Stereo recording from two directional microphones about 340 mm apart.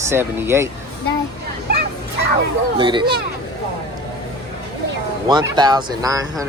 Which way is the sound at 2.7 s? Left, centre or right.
Centre.